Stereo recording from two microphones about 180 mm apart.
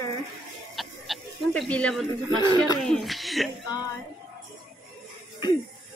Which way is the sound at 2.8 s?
Centre (ahead or behind).